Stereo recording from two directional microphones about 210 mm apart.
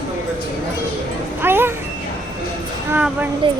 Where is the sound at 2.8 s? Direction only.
10° right (ahead or behind).